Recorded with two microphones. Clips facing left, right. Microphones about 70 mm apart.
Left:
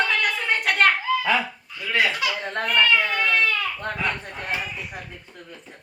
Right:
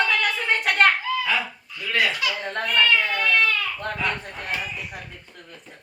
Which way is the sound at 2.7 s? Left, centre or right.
Centre.